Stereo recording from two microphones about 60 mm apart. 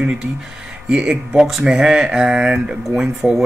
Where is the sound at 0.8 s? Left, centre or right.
Centre.